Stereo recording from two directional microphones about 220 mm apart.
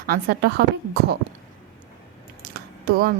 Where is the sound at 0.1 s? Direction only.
45° right (ahead or behind).